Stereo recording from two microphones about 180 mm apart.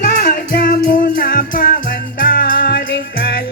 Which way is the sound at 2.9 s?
60° left (ahead or behind).